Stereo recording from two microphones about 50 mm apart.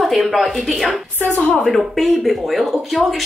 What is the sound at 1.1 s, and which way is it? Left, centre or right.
Speech, left.